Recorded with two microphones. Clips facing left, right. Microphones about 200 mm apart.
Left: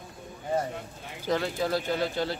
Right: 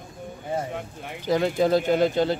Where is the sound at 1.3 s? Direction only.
20° right (ahead or behind).